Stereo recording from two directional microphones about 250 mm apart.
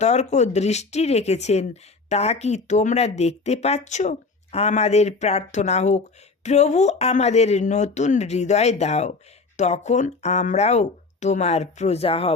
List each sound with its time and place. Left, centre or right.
0.0 s speech: left